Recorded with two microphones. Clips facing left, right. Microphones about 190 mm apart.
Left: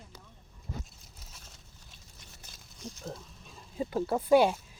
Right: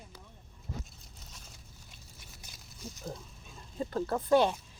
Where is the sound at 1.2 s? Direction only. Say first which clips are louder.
Right 1 dB; 5° left (ahead or behind).